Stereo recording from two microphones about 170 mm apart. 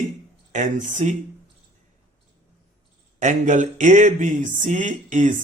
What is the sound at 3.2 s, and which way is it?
Speech, 45° right (ahead or behind).